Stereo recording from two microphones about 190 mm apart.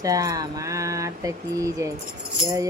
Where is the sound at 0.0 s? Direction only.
20° right (ahead or behind).